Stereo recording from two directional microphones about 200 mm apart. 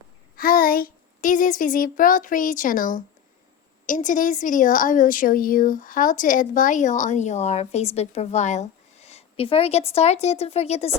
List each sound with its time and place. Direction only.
0.3 s a woman's voice: 45° left (ahead or behind)